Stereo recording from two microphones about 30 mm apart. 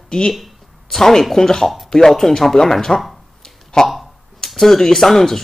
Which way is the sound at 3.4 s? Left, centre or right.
Centre.